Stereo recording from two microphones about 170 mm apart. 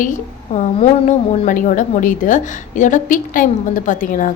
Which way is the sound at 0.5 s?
45° left (ahead or behind).